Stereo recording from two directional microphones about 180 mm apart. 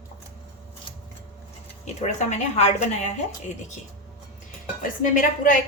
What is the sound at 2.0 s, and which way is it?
A woman's voice, 40° left (ahead or behind).